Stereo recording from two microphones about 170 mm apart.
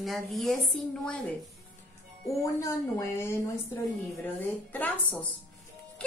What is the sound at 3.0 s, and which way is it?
Speech, 15° left (ahead or behind).